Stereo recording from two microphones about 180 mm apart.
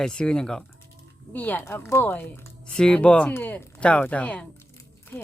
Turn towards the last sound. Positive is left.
turn(degrees=10)  # may be behind; listen again after turning